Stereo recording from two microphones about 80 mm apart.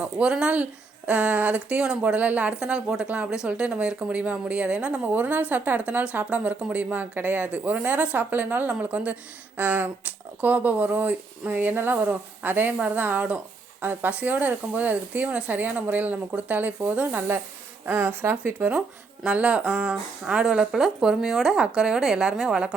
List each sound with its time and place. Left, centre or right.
0.0 s speech: centre; by 18.7 s right
19.2 s speech: centre